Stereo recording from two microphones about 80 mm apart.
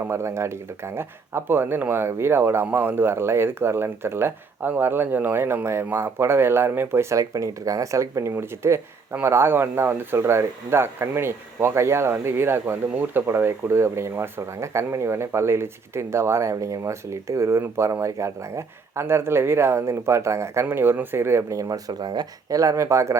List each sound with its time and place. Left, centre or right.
0.1 s speech: right